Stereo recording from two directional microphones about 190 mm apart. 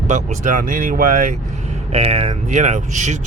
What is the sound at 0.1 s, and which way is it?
Speech, 45° right (ahead or behind).